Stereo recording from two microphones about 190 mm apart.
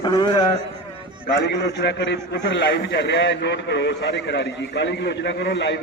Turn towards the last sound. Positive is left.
turn(degrees=65)  # may be behind; listen again after turning